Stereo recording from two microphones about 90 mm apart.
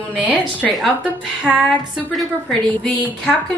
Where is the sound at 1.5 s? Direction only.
10° left (ahead or behind).